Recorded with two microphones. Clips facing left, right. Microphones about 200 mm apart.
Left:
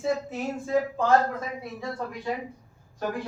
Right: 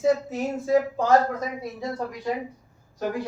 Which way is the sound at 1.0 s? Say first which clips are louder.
Right 2 dB; 40° right (ahead or behind).